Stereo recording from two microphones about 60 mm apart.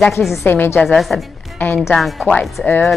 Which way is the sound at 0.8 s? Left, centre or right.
Centre.